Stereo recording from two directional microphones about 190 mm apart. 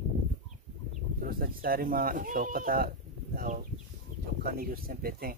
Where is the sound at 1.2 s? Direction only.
50° right (ahead or behind).